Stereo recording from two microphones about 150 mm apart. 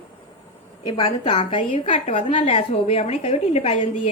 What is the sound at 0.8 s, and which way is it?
A woman's voice, 30° left (ahead or behind).